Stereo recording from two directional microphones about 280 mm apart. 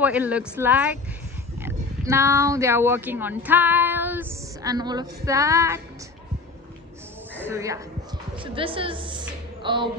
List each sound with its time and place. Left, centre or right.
0.0 s speech: centre
7.4 s a woman's voice: centre